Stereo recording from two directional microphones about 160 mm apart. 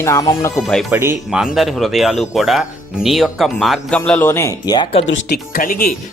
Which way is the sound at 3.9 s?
10° left (ahead or behind).